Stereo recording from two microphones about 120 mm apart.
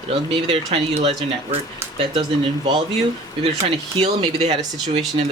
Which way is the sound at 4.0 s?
55° right (ahead or behind).